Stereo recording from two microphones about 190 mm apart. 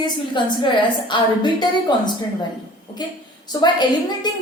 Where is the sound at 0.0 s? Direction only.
25° left (ahead or behind).